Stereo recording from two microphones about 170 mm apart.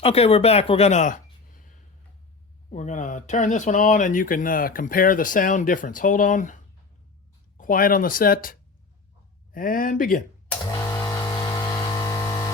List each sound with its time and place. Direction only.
0.0 s speech: 35° left (ahead or behind)
7.6 s speech: 55° left (ahead or behind)
10.7 s a sound: 20° left (ahead or behind)
12.0 s chainsaw: 20° left (ahead or behind)